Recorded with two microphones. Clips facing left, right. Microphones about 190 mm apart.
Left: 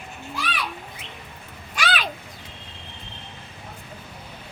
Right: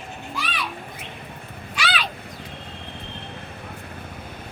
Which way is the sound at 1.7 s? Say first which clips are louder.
Left 1 dB; 45° left (ahead or behind).